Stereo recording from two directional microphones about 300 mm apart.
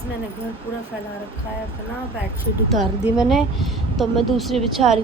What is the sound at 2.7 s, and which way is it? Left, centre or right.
Speech, centre.